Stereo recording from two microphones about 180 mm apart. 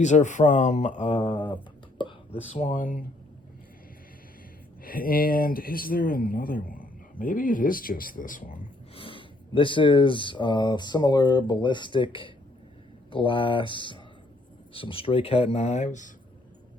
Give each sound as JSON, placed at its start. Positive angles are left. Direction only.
{"t": 0.0, "sound": "speech", "side_deg": 40}
{"t": 1.0, "sound": "speech", "side_deg": 30}
{"t": 2.0, "sound": "whispering", "side_deg": 30}
{"t": 2.6, "sound": "speech", "side_deg": 45}
{"t": 4.8, "sound": "speech", "side_deg": 55}
{"t": 9.0, "sound": "speech", "side_deg": 30}